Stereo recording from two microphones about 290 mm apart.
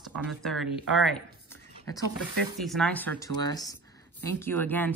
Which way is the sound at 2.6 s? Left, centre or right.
Centre.